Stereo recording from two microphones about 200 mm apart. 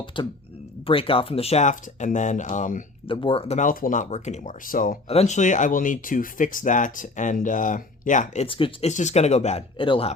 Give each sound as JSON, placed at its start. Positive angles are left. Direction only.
{"t": 0.1, "sound": "speech", "side_deg": 25}
{"t": 3.1, "sound": "speech", "side_deg": 25}
{"t": 3.6, "sound": "speech", "side_deg": 40}
{"t": 5.0, "sound": "speech", "side_deg": 30}